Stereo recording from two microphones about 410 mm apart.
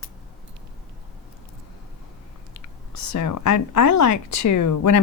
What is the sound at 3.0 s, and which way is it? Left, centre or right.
Speech, left.